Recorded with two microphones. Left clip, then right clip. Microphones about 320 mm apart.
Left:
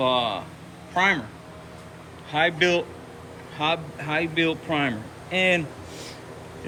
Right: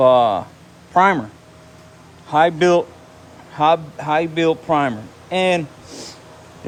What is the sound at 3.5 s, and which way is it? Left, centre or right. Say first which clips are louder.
A man's voice: right 10 dB; centre.